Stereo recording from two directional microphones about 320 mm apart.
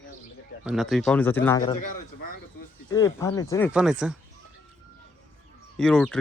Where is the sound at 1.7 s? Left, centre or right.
Left.